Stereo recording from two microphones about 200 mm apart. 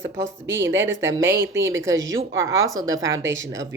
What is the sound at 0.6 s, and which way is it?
Speech, 10° right (ahead or behind).